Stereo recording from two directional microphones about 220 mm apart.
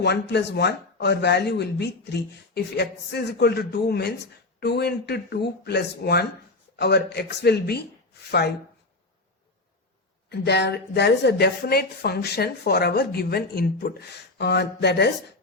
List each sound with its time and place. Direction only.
0.0 s speech: 50° left (ahead or behind)
10.2 s speech: 50° left (ahead or behind)